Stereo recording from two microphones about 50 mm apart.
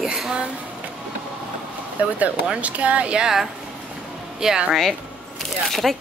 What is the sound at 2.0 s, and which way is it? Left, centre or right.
Speech, right.